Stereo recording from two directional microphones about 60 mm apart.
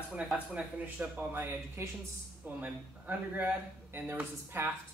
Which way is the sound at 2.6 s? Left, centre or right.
Right.